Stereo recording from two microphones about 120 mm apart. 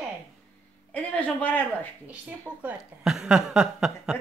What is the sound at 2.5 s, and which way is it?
Speech, 10° right (ahead or behind).